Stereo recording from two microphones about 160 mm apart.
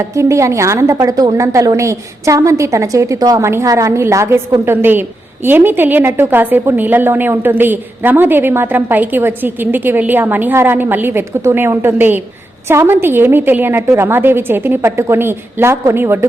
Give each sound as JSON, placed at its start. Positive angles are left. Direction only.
{"t": 0.2, "sound": "a woman's voice", "side_deg": -20}